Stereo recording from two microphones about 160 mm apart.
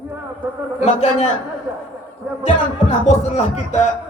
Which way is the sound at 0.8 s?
45° left (ahead or behind).